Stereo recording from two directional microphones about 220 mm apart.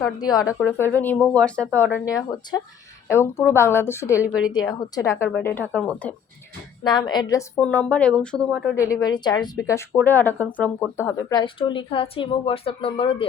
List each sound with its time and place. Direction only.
0.2 s a woman's voice: 15° left (ahead or behind)
4.2 s a woman's voice: 5° right (ahead or behind)
5.0 s a woman's voice: 10° left (ahead or behind)
6.8 s a woman's voice: 20° left (ahead or behind); by 8.6 s centre (ahead or behind)
8.7 s a woman's voice: 15° left (ahead or behind)